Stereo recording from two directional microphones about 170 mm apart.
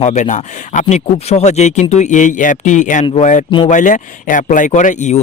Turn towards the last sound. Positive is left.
turn(degrees=45)  # may be behind; listen again after turning